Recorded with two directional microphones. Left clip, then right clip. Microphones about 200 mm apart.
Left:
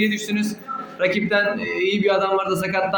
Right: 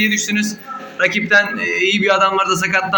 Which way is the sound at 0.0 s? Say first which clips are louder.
Right 6 dB; 5° left (ahead or behind).